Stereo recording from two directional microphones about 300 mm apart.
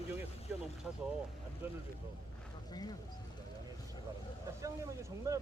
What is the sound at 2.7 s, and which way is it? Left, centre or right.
Speech, centre.